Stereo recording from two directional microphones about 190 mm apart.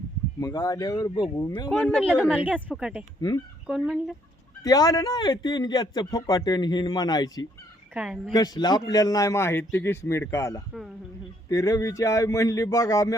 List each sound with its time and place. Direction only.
0.3 s a man's voice: 15° left (ahead or behind)
1.7 s speech: 5° left (ahead or behind)
3.2 s a man's voice: 20° left (ahead or behind)
3.7 s speech: centre (ahead or behind)
4.6 s a man's voice: 20° left (ahead or behind)
7.9 s speech: 5° right (ahead or behind)
8.3 s a man's voice: 20° left (ahead or behind)